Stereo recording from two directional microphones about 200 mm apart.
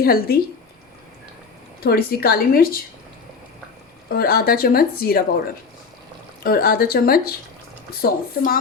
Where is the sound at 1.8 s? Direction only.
50° left (ahead or behind).